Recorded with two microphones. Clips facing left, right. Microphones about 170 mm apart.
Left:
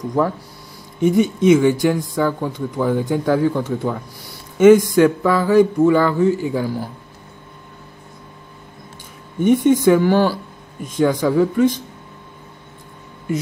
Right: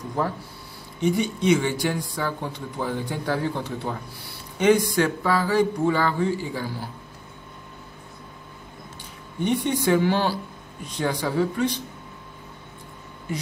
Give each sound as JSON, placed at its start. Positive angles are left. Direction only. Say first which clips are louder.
{"t": 1.0, "sound": "speech", "louder": "left 8 dB", "side_deg": 45}
{"t": 9.4, "sound": "speech", "louder": "left 10 dB", "side_deg": 45}